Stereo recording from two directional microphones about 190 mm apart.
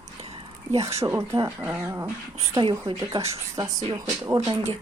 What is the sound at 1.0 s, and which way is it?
Speech, 15° right (ahead or behind).